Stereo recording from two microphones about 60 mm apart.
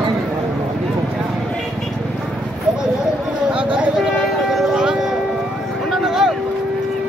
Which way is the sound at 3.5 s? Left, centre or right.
Right.